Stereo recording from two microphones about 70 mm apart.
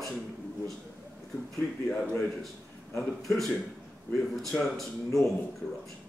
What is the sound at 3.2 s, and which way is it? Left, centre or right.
Speech, centre.